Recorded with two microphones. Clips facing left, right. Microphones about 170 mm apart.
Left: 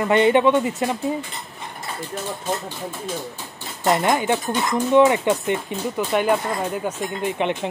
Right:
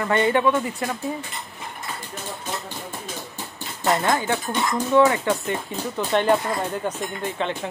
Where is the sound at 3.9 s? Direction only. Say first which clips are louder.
Left 2 dB; 15° left (ahead or behind).